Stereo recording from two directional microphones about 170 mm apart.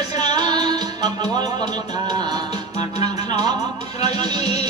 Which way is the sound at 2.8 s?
40° left (ahead or behind).